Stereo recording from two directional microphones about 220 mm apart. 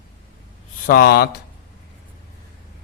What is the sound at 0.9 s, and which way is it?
Speech, 45° left (ahead or behind).